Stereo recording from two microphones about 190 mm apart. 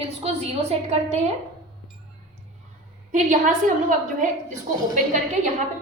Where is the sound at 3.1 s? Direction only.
40° right (ahead or behind).